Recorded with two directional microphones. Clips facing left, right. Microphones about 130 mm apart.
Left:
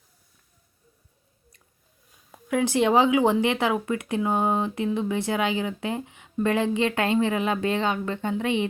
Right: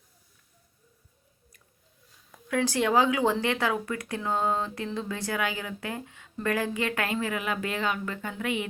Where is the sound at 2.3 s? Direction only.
20° left (ahead or behind).